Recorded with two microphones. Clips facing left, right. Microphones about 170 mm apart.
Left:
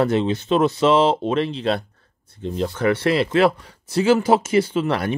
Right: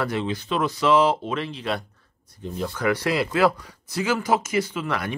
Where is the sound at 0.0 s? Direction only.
25° left (ahead or behind).